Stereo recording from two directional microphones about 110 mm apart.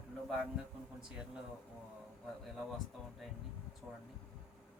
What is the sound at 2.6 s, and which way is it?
Speech, 5° left (ahead or behind).